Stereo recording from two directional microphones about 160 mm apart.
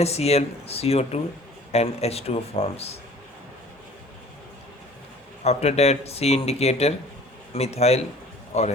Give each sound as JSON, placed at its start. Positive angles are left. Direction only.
{"t": 0.0, "sound": "a man's voice", "side_deg": 40}
{"t": 5.4, "sound": "a man's voice", "side_deg": 40}